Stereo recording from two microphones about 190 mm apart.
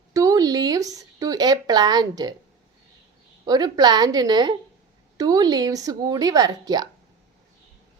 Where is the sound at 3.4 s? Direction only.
20° right (ahead or behind).